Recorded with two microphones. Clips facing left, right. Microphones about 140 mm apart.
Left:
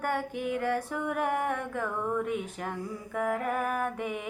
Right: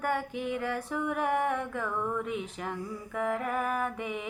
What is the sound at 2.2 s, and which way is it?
Female singing, 50° left (ahead or behind).